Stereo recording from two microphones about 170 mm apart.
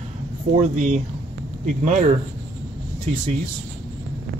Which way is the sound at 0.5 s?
45° right (ahead or behind).